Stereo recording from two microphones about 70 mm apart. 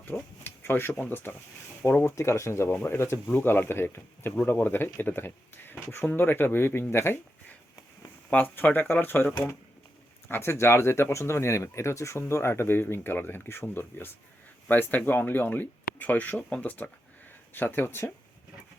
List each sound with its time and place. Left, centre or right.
0.0 s a sound: left
0.9 s speech: left
2.1 s speech: left
8.3 s speech: left